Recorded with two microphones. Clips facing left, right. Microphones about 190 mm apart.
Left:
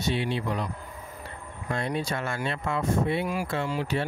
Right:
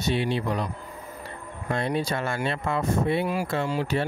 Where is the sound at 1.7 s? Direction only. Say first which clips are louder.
Right 3 dB; 30° right (ahead or behind).